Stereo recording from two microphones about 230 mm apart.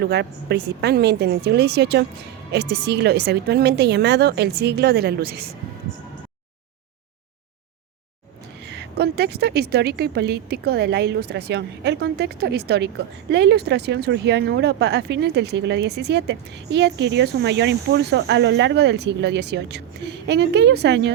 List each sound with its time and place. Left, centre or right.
0.0 s speech: right
8.6 s speech: right